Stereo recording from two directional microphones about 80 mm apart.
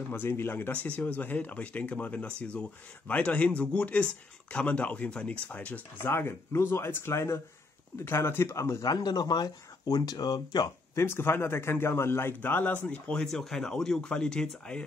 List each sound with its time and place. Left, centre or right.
0.1 s a man's voice: left
11.0 s a man's voice: left; by 14.5 s centre